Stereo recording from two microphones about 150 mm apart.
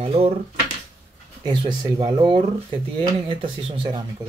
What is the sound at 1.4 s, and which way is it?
Speech, 30° right (ahead or behind).